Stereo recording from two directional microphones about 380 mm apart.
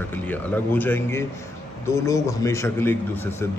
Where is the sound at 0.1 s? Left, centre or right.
Centre.